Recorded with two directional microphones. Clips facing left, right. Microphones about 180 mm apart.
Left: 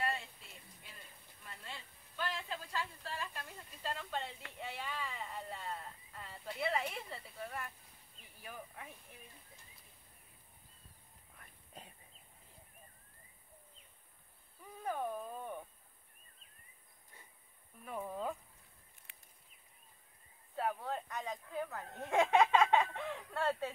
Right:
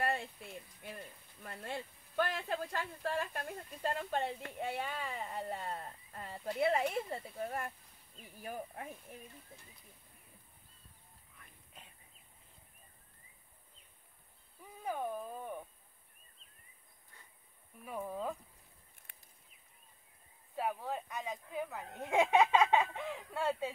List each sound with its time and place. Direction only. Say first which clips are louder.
0.0 s a sound: right 4 dB; 50° right (ahead or behind)
1.4 s speech: right 9 dB; 55° right (ahead or behind)
11.3 s horse: left 4 dB; 35° left (ahead or behind)
14.6 s speech: even; 10° right (ahead or behind)
17.8 s speech: right 1 dB; 5° right (ahead or behind)
19.1 s a sound: right 1 dB; 45° right (ahead or behind)
20.5 s speech: right 1 dB; 10° right (ahead or behind)